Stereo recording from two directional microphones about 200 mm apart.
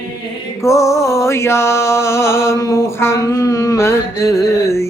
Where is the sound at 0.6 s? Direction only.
15° left (ahead or behind).